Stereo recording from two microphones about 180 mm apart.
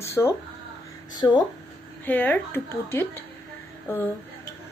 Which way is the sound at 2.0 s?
10° left (ahead or behind).